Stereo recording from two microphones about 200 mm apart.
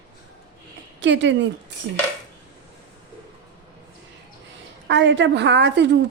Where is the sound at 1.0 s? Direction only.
65° right (ahead or behind).